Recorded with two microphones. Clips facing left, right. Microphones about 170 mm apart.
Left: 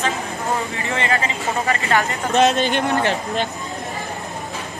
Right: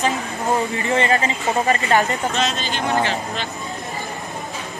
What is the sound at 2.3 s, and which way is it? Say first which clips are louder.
Speech: left 7 dB; 60° left (ahead or behind).